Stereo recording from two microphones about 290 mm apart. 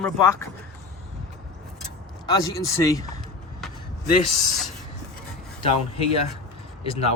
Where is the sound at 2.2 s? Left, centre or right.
Centre.